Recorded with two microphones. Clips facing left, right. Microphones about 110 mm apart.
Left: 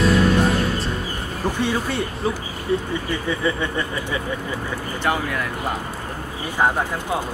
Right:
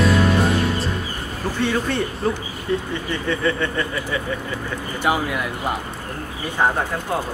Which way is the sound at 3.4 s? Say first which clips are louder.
Right 1 dB; 15° left (ahead or behind).